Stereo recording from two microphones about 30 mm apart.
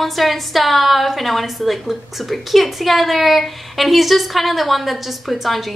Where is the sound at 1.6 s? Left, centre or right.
Centre.